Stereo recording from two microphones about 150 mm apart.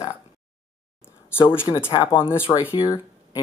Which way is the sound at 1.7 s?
30° left (ahead or behind).